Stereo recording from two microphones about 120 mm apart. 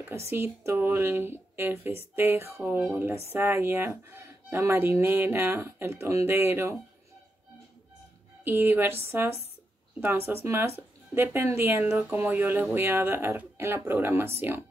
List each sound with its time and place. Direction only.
0.1 s speech: 20° right (ahead or behind)
8.5 s speech: 15° right (ahead or behind)